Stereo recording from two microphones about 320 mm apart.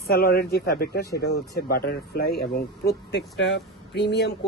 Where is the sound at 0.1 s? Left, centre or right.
Left.